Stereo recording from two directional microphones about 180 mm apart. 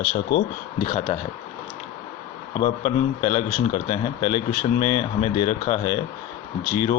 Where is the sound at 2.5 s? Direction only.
30° left (ahead or behind).